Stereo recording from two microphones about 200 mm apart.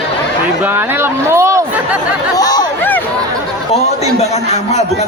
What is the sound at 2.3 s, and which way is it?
Chatter, 20° left (ahead or behind).